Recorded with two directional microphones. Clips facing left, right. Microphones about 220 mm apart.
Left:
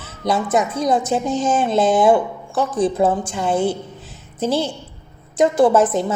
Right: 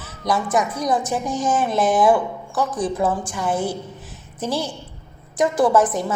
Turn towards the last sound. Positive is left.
turn(degrees=25)  # may be behind; listen again after turning